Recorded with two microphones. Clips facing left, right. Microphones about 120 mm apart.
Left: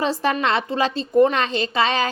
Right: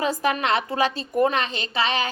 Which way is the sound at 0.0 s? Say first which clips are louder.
Left 2 dB; 30° left (ahead or behind).